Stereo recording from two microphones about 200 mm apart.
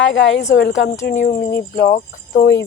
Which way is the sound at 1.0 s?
45° left (ahead or behind).